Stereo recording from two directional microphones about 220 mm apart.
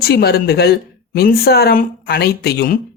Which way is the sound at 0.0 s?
45° left (ahead or behind).